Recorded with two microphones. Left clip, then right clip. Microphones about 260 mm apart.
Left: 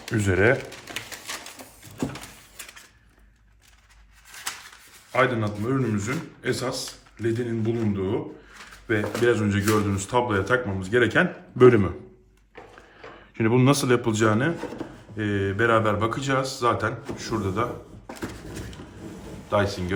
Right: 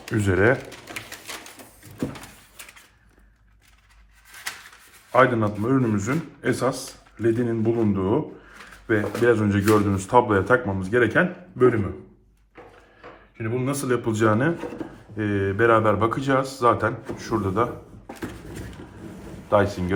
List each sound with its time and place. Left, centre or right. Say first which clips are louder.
0.0 s pigeon: right 1 dB; centre
5.1 s a man's voice: right 4 dB; centre
13.3 s speech: left 6 dB; left
13.9 s a man's voice: even; centre
18.1 s a sound: even; centre
19.5 s a man's voice: right 4 dB; centre